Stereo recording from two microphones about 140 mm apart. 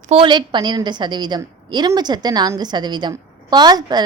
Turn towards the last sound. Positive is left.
turn(degrees=-30)  # may be behind; listen again after turning